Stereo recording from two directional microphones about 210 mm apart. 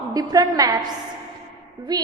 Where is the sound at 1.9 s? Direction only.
20° right (ahead or behind).